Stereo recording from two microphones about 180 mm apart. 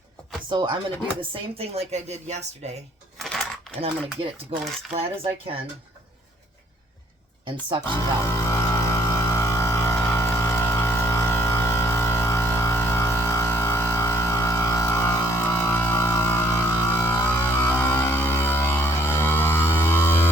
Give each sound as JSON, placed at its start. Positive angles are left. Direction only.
{"t": 0.5, "sound": "speech", "side_deg": -25}
{"t": 3.2, "sound": "typing", "side_deg": 0}
{"t": 3.8, "sound": "speech", "side_deg": -30}
{"t": 7.4, "sound": "speech", "side_deg": -25}
{"t": 8.2, "sound": "vehicle", "side_deg": 15}